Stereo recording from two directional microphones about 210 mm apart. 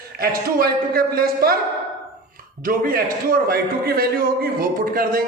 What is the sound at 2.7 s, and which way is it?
A man's voice, 45° right (ahead or behind).